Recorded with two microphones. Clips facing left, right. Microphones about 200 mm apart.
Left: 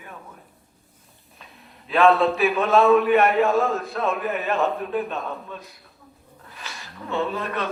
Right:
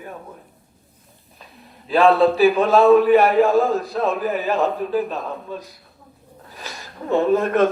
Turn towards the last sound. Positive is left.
turn(degrees=-45)  # may be behind; listen again after turning